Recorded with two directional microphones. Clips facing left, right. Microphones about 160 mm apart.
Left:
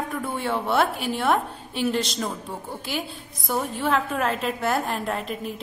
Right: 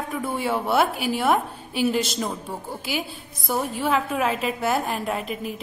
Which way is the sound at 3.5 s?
5° right (ahead or behind).